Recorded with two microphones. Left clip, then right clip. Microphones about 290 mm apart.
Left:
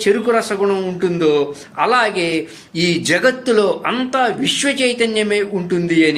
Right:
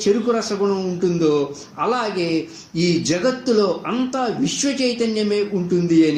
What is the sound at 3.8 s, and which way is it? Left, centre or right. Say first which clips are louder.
Speech: left 6 dB; left.